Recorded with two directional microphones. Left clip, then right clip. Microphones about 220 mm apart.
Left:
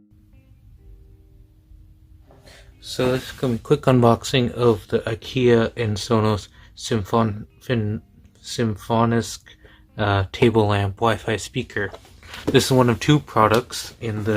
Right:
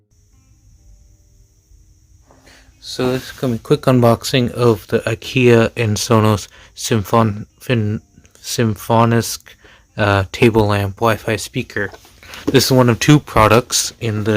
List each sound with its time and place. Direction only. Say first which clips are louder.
2.4 s speech: right 4 dB; 15° right (ahead or behind); by 14.3 s 50° right (ahead or behind)